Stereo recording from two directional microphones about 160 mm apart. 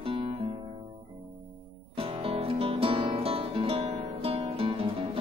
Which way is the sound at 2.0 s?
35° right (ahead or behind).